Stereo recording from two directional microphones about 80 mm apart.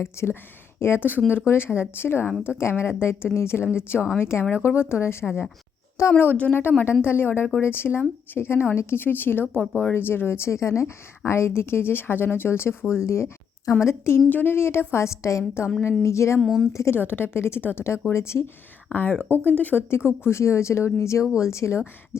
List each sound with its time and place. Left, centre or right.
0.0 s a woman's voice: left
6.2 s a woman's voice: left
16.4 s speech: centre
16.7 s a woman's voice: left
17.0 s a woman's voice: left
19.2 s speech: right
19.5 s speech: left
20.1 s a woman's voice: left